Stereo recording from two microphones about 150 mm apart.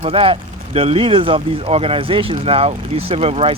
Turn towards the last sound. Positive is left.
turn(degrees=-40)  # may be behind; listen again after turning